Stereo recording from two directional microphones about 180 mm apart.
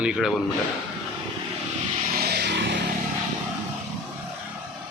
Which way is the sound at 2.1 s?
60° right (ahead or behind).